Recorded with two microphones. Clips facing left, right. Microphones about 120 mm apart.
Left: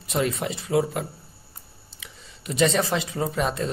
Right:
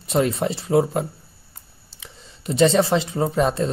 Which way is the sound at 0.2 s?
35° right (ahead or behind).